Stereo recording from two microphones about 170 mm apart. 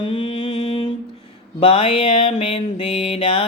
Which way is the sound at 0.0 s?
30° left (ahead or behind).